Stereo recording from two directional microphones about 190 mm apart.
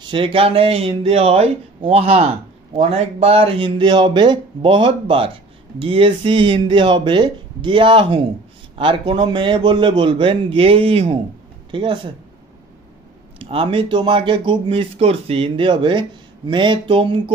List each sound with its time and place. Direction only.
0.0 s speech: 25° right (ahead or behind)
13.4 s speech: 30° right (ahead or behind)